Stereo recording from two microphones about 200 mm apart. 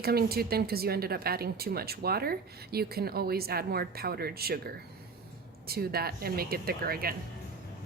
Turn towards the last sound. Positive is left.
turn(degrees=-50)  # may be behind; listen again after turning